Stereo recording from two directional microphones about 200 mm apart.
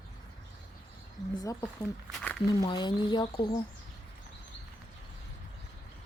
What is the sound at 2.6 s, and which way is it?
A woman's voice, 20° left (ahead or behind).